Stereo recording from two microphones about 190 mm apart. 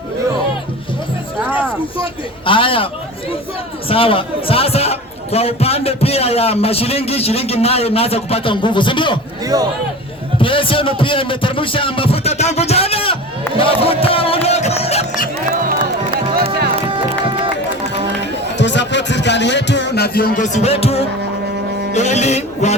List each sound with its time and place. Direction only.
2.4 s music: 25° left (ahead or behind)
3.8 s a man's voice: 30° left (ahead or behind)
9.4 s speech: 20° right (ahead or behind)
10.4 s music: 25° left (ahead or behind)
16.3 s music: 55° right (ahead or behind)
18.5 s a man's voice: 70° left (ahead or behind); by 22.7 s 35° left (ahead or behind)